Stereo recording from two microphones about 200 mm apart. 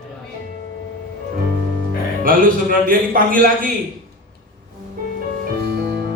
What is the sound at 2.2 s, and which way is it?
A man's voice, 45° right (ahead or behind).